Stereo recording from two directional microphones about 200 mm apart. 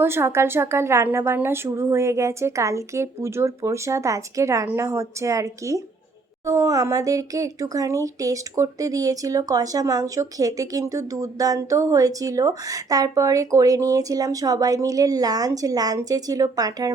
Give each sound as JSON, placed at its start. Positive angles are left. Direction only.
{"t": 0.0, "sound": "speech", "side_deg": -10}